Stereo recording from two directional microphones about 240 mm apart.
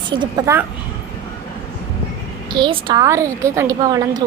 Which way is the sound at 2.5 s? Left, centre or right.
Centre.